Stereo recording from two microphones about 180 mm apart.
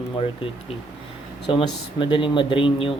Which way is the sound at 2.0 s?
30° left (ahead or behind).